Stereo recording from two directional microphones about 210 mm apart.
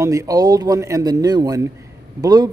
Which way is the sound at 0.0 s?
15° right (ahead or behind).